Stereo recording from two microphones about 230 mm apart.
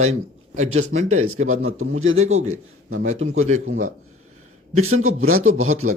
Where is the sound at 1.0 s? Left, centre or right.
Right.